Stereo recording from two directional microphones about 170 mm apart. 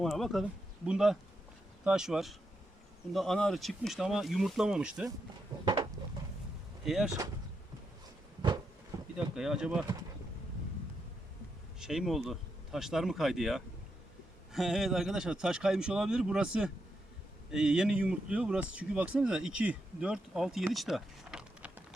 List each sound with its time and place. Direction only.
0.0 s speech: centre (ahead or behind)
5.6 s a sound: 25° right (ahead or behind)
6.8 s speech: centre (ahead or behind)
9.1 s speech: 5° right (ahead or behind)
11.8 s speech: centre (ahead or behind)